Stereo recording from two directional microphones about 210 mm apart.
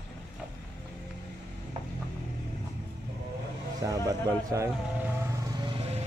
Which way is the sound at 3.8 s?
15° right (ahead or behind).